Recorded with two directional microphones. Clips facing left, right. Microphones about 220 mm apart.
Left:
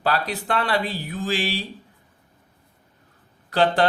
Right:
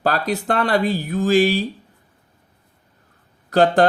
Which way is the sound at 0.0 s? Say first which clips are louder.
Right 4 dB; 45° right (ahead or behind).